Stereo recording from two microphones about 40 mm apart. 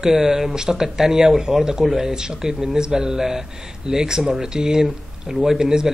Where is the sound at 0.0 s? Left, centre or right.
Centre.